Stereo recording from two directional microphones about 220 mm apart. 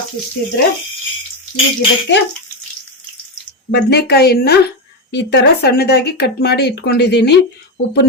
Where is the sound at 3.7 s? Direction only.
50° left (ahead or behind).